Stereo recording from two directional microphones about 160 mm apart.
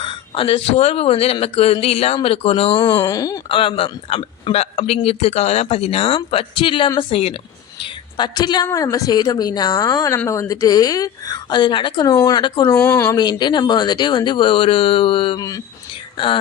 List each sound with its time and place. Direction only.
0.0 s speech: 35° left (ahead or behind)
8.1 s speech: 25° left (ahead or behind)
12.6 s speech: 15° left (ahead or behind)
13.1 s speech: 25° left (ahead or behind)